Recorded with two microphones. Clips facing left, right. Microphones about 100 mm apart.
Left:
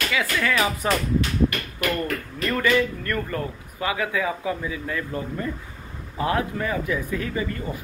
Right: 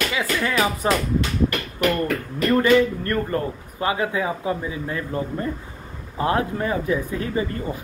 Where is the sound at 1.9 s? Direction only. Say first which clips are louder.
Right 3 dB; 30° right (ahead or behind).